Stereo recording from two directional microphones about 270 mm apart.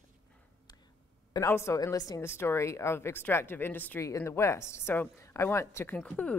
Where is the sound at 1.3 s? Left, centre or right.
Centre.